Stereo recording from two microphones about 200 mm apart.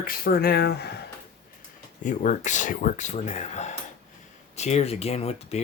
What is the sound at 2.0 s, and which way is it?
Speech, 40° left (ahead or behind).